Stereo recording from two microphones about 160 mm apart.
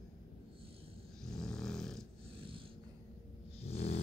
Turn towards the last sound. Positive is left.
turn(degrees=40)  # may be behind; listen again after turning